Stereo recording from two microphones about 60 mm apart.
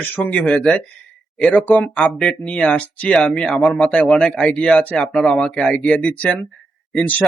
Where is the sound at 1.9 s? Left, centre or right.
Centre.